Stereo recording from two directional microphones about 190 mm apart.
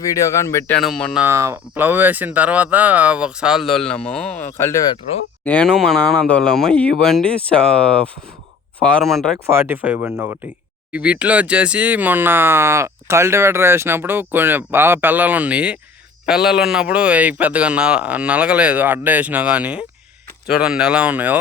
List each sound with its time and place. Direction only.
0.0 s speech: 15° left (ahead or behind)
0.8 s speech: centre (ahead or behind)
1.2 s speech: 15° right (ahead or behind); by 4.9 s 15° left (ahead or behind)
5.5 s speech: 5° left (ahead or behind)
9.5 s speech: 10° right (ahead or behind)